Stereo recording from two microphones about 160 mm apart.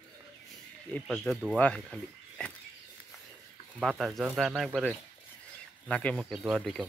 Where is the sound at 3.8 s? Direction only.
Centre (ahead or behind).